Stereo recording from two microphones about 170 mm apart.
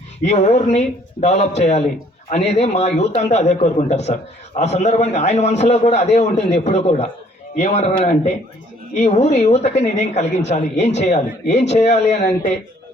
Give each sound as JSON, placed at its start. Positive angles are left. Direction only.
{"t": 0.3, "sound": "a man's voice", "side_deg": 45}
{"t": 10.2, "sound": "speech", "side_deg": 90}
{"t": 10.5, "sound": "a man's voice", "side_deg": 40}